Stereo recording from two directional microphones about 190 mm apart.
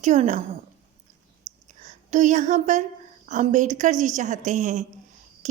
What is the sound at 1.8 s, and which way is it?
A woman's voice, 40° right (ahead or behind).